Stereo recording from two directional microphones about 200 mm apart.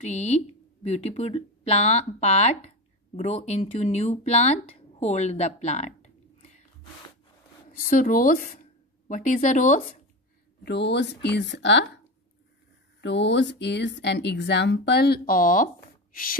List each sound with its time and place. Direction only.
0.0 s speech: 35° left (ahead or behind)
7.9 s speech: 40° left (ahead or behind)
10.6 s speech: 60° left (ahead or behind)
13.0 s speech: 65° left (ahead or behind); by 16.3 s 45° left (ahead or behind)